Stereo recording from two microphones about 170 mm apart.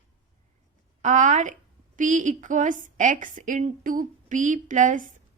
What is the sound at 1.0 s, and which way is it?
A woman's voice, 45° right (ahead or behind).